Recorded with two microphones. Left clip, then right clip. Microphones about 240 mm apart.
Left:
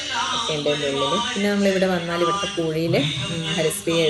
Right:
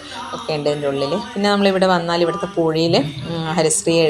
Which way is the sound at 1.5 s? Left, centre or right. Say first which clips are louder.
Right 7 dB; right.